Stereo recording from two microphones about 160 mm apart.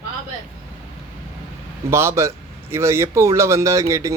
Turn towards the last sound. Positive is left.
turn(degrees=-20)  # may be behind; listen again after turning